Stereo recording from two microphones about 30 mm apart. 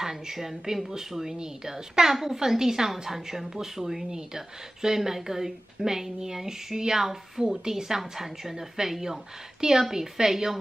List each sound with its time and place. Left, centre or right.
0.0 s speech: centre